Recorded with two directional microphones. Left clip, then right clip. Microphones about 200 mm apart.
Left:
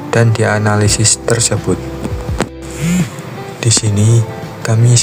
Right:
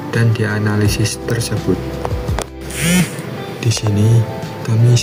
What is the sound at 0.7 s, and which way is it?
Speech, 50° left (ahead or behind).